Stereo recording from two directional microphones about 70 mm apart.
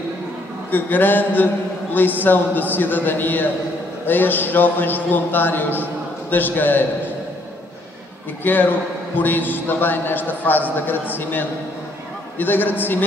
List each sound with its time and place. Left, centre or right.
0.7 s a man's voice: left
8.5 s a man's voice: left